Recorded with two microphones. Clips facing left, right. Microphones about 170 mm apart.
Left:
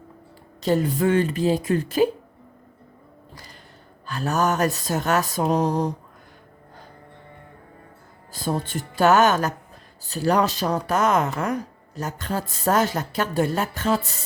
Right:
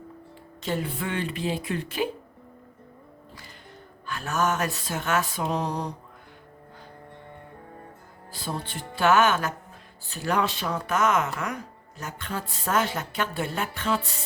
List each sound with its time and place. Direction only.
0.6 s speech: 40° left (ahead or behind)
4.0 s speech: 35° left (ahead or behind)
8.3 s speech: 45° left (ahead or behind)